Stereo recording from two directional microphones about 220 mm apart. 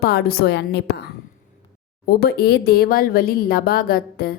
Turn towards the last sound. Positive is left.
turn(degrees=45)  # may be behind; listen again after turning